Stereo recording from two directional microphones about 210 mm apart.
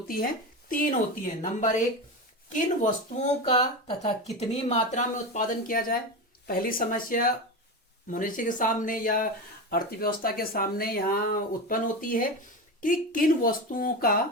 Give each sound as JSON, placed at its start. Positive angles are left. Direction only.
{"t": 0.7, "sound": "speech", "side_deg": 40}